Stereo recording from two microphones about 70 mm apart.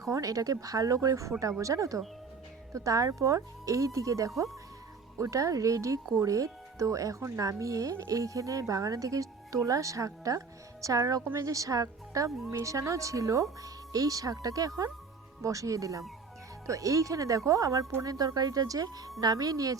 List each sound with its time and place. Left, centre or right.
0.0 s speech: right
15.4 s speech: right